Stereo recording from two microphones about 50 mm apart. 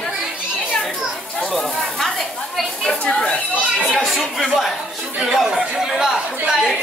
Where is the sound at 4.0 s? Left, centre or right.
Centre.